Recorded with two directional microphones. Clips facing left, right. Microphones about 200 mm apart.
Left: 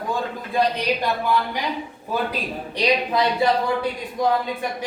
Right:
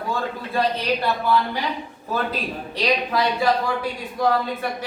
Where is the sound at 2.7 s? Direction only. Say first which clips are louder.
Left 2 dB; 20° left (ahead or behind).